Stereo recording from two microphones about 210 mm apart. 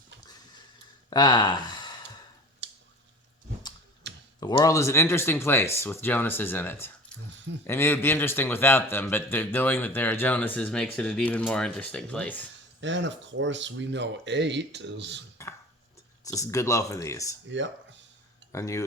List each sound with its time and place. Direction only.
1.1 s speech: 20° left (ahead or behind)
2.6 s a sound: 55° right (ahead or behind)
4.4 s a man's voice: 15° left (ahead or behind)
12.8 s speech: 60° right (ahead or behind)
15.4 s a sound: 15° left (ahead or behind)
16.2 s a man's voice: 15° left (ahead or behind)
18.5 s a man's voice: 15° left (ahead or behind)